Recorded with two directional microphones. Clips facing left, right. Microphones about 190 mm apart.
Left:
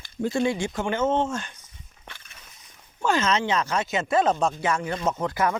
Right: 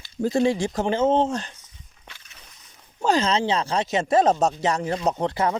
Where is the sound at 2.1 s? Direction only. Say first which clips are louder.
Left 3 dB; 55° left (ahead or behind).